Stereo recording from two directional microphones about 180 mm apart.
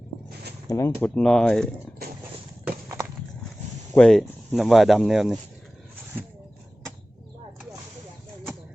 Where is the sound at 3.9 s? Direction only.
5° left (ahead or behind).